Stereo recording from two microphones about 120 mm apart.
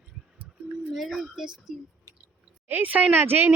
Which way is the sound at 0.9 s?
Centre (ahead or behind).